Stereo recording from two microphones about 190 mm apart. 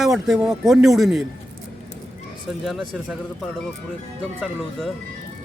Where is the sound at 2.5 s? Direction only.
Centre (ahead or behind).